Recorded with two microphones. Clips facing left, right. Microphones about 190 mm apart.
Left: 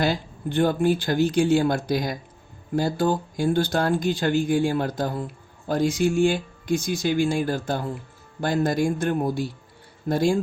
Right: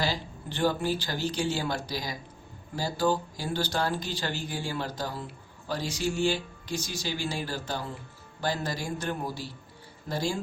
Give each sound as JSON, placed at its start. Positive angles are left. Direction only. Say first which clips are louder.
{"t": 0.0, "sound": "speech", "louder": "left 7 dB", "side_deg": 55}